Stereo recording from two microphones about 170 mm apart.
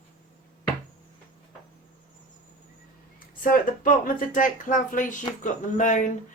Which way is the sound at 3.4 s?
55° left (ahead or behind).